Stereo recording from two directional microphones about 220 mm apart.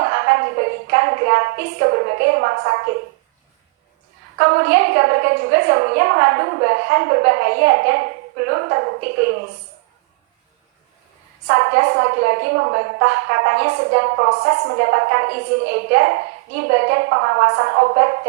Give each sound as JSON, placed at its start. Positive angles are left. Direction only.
{"t": 0.0, "sound": "a sound", "side_deg": -45}
{"t": 4.4, "sound": "a woman's voice", "side_deg": -50}
{"t": 11.4, "sound": "a woman's voice", "side_deg": -50}